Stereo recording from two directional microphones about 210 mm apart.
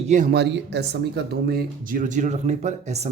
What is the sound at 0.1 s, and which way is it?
Speech, 40° right (ahead or behind).